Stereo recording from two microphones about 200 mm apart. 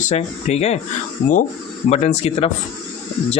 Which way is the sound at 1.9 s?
35° left (ahead or behind).